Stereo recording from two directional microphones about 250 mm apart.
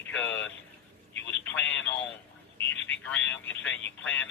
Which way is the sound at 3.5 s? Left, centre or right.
Left.